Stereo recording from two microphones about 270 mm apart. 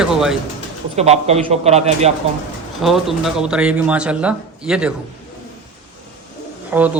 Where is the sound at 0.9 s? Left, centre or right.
Right.